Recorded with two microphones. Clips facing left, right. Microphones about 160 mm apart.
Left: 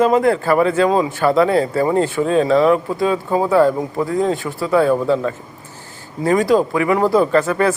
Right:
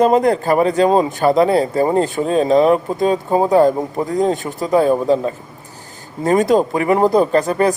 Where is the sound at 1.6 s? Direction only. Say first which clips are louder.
Right 1 dB; 35° right (ahead or behind).